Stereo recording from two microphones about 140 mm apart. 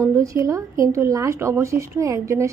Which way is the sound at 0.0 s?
20° right (ahead or behind).